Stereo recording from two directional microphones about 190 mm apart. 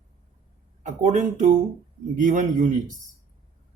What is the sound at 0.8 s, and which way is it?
Speech, 40° right (ahead or behind).